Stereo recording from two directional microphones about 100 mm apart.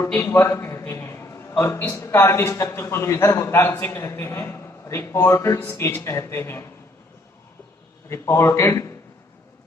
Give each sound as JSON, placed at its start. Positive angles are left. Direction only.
{"t": 0.1, "sound": "a man's voice", "side_deg": 25}
{"t": 8.1, "sound": "a man's voice", "side_deg": 25}